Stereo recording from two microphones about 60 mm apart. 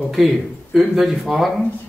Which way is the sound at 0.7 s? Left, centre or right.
Centre.